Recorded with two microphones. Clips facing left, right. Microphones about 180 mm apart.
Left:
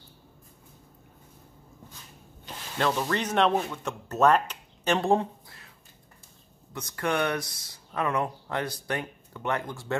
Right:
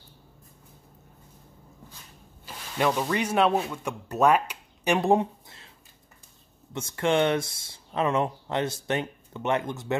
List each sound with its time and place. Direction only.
2.4 s speech: 10° right (ahead or behind)
6.7 s speech: 25° right (ahead or behind)